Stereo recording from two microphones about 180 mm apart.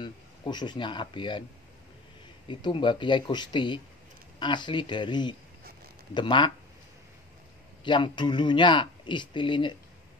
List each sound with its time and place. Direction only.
0.0 s speech: 25° left (ahead or behind)
2.4 s speech: 25° left (ahead or behind)
7.8 s speech: 25° left (ahead or behind)